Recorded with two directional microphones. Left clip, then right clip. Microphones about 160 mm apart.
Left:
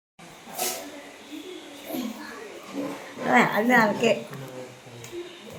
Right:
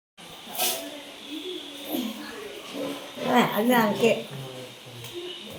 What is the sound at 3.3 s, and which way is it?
Speech, 20° right (ahead or behind).